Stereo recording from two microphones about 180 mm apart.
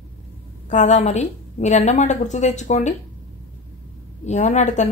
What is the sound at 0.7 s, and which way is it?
A woman's voice, 40° left (ahead or behind).